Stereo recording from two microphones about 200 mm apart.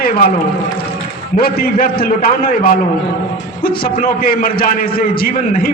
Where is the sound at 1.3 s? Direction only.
45° left (ahead or behind).